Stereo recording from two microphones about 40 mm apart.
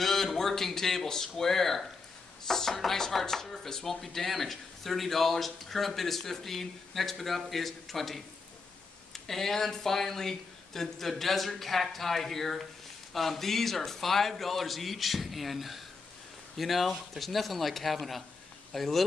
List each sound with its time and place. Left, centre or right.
0.0 s speech: centre
9.3 s speech: centre